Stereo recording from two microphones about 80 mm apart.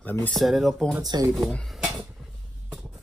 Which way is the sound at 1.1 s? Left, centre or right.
Right.